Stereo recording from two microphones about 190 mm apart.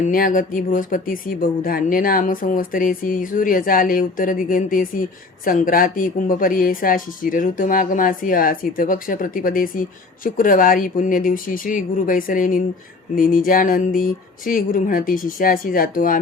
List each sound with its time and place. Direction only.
0.1 s speech: 45° left (ahead or behind)